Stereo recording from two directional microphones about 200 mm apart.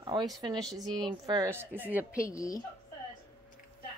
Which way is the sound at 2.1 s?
15° left (ahead or behind).